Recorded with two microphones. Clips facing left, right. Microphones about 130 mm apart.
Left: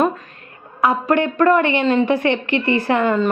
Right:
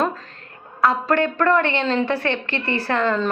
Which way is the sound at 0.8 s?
15° left (ahead or behind).